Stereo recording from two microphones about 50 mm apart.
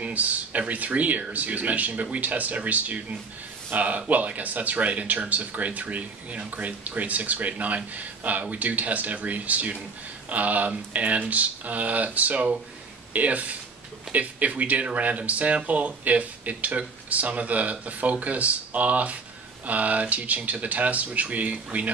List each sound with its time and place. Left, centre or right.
0.0 s speech: right